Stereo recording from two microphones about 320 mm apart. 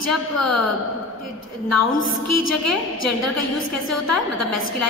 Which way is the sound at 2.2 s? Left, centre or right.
Left.